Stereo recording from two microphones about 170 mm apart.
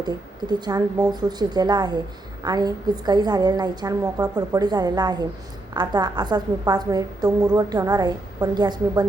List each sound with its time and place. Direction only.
0.0 s a woman's voice: 25° right (ahead or behind)